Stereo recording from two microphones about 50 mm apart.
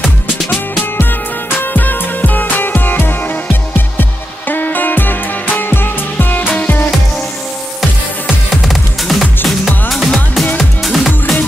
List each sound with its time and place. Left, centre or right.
1.6 s music: left
4.5 s music: left
8.6 s music: centre